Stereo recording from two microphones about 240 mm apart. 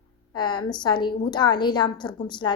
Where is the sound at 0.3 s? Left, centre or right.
Centre.